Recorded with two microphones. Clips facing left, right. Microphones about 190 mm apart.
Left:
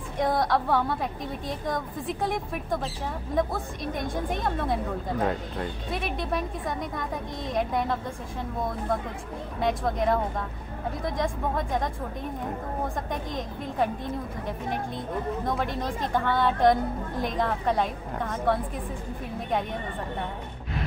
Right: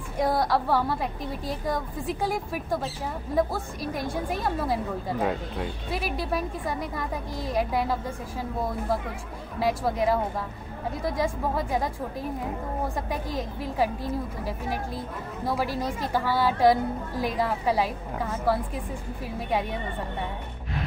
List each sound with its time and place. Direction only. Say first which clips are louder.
0.2 s a woman's voice: even; centre (ahead or behind)